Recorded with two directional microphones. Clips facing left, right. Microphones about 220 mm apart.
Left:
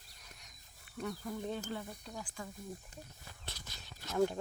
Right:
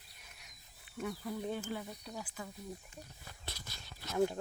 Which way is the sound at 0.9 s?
5° right (ahead or behind).